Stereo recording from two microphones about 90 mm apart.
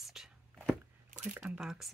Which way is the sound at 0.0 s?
5° right (ahead or behind).